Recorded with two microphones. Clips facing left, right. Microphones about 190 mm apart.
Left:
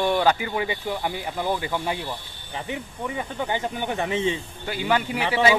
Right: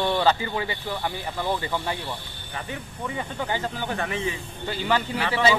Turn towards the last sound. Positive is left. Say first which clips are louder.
# left 2 dB
turn(degrees=15)  # may be behind; listen again after turning